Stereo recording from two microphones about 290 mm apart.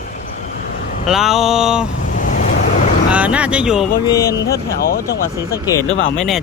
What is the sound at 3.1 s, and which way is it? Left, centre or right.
Speech, centre.